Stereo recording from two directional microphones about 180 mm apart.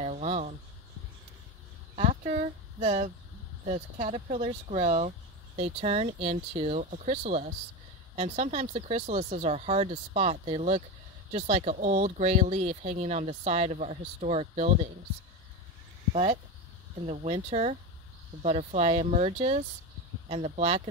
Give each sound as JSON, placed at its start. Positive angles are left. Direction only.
{"t": 0.0, "sound": "a sound", "side_deg": -40}
{"t": 2.0, "sound": "speech", "side_deg": -40}
{"t": 16.1, "sound": "speech", "side_deg": -35}